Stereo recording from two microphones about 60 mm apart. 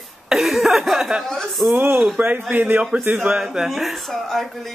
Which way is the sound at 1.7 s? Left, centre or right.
Right.